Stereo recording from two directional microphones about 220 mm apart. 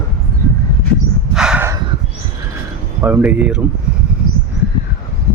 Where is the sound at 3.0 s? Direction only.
10° right (ahead or behind).